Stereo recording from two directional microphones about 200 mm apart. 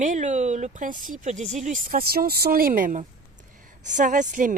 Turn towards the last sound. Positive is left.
turn(degrees=-40)  # may be behind; listen again after turning